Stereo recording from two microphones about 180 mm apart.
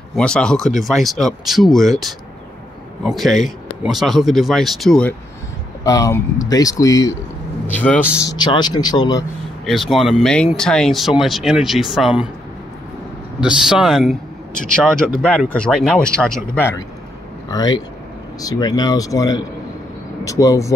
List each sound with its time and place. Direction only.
0.1 s speech: 5° left (ahead or behind)
5.9 s speech: 15° left (ahead or behind)
8.4 s speech: 25° left (ahead or behind)
9.7 s speech: centre (ahead or behind)
13.4 s speech: 5° right (ahead or behind)
15.5 s speech: 5° left (ahead or behind)
17.5 s speech: 20° left (ahead or behind)